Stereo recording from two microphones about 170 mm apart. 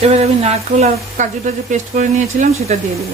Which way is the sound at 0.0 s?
40° right (ahead or behind).